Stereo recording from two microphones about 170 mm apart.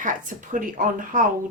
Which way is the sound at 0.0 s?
50° right (ahead or behind).